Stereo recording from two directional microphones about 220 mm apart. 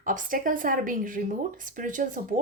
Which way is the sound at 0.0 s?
35° right (ahead or behind).